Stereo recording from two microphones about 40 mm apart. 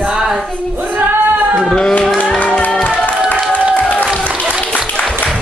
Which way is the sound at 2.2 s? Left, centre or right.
Left.